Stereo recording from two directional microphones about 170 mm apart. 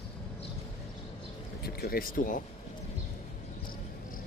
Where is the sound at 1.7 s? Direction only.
65° left (ahead or behind).